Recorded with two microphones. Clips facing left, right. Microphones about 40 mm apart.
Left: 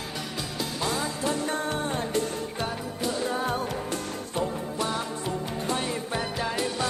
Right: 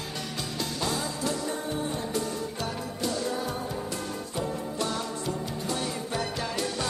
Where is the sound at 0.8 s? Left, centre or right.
Centre.